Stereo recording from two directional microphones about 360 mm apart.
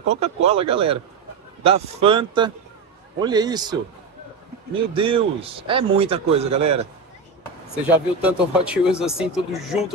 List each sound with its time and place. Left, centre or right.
0.1 s a man's voice: centre
4.7 s a man's voice: centre
7.7 s speech: centre